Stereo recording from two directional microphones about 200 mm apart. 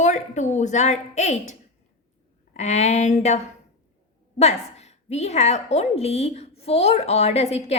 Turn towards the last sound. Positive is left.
turn(degrees=30)  # may be behind; listen again after turning